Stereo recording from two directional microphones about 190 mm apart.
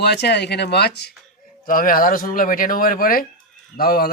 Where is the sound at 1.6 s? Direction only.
50° left (ahead or behind).